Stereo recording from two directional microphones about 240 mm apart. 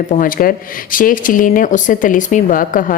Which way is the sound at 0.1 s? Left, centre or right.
Left.